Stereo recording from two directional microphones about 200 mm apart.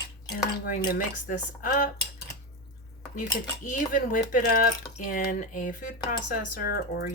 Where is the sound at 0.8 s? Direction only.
50° left (ahead or behind).